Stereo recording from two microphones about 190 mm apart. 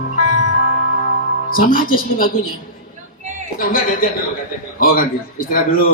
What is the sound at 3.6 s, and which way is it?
Music, 50° left (ahead or behind).